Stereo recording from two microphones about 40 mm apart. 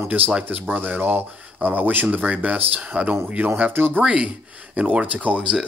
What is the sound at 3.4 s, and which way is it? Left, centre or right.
Speech, right.